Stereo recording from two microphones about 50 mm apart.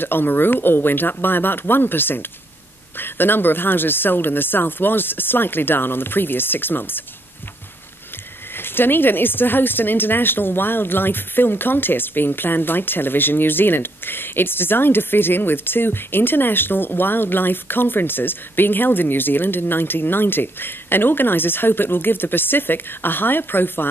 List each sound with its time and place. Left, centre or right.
0.0 s speech: left
8.5 s speech: left